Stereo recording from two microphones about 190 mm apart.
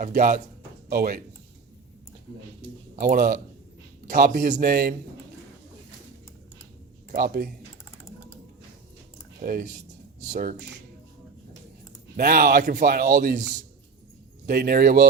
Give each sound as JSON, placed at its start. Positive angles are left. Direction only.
{"t": 0.0, "sound": "a man's voice", "side_deg": -45}
{"t": 3.0, "sound": "a man's voice", "side_deg": -50}
{"t": 7.1, "sound": "a man's voice", "side_deg": -50}
{"t": 9.4, "sound": "a man's voice", "side_deg": -50}
{"t": 12.1, "sound": "a man's voice", "side_deg": -50}
{"t": 14.4, "sound": "a man's voice", "side_deg": -50}